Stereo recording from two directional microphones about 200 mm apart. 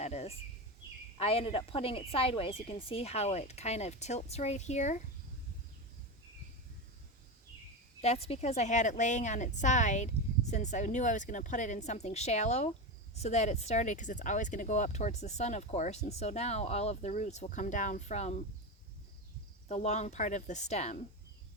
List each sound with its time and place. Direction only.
0.0 s a sound: 35° left (ahead or behind)
1.2 s speech: 30° left (ahead or behind)
8.0 s speech: 30° left (ahead or behind)
19.6 s speech: 35° left (ahead or behind)